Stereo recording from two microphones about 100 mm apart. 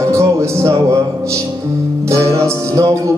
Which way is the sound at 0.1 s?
30° right (ahead or behind).